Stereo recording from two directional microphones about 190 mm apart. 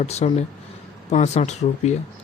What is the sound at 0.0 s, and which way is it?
Speech, 35° left (ahead or behind).